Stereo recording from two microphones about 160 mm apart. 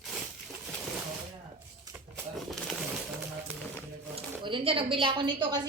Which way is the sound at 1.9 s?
25° right (ahead or behind).